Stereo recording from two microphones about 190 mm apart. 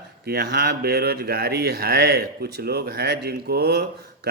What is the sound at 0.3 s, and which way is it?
A man's voice, 55° right (ahead or behind).